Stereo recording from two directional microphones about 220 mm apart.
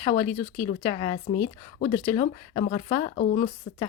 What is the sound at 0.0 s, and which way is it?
Speech, 20° left (ahead or behind).